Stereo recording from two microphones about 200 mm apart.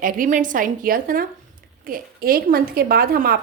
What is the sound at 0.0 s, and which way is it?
A woman's voice, 45° right (ahead or behind).